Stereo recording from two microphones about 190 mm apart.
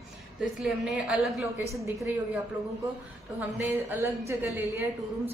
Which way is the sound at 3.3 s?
10° right (ahead or behind).